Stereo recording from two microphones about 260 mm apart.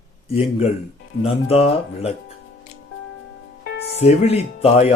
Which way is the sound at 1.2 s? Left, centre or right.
Left.